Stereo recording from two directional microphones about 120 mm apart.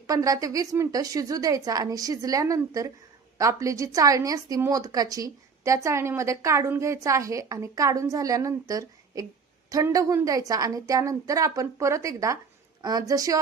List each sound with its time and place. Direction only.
0.1 s speech: 30° right (ahead or behind)